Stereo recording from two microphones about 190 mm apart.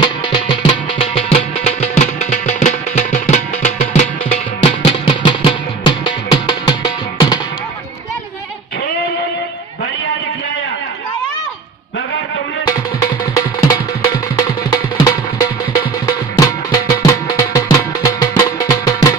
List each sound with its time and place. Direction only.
0.0 s music: 25° left (ahead or behind)
12.6 s music: 20° left (ahead or behind)